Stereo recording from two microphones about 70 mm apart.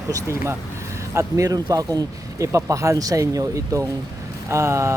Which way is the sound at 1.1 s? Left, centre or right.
Right.